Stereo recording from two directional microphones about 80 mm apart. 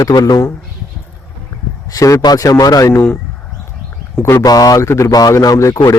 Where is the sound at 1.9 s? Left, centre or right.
Left.